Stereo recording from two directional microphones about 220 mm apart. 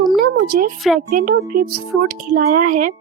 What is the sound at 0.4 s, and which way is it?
Speech, 40° right (ahead or behind).